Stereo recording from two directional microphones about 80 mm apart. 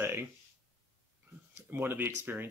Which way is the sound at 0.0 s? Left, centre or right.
Right.